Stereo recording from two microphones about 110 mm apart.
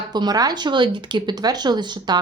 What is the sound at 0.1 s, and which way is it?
Speech, 40° right (ahead or behind).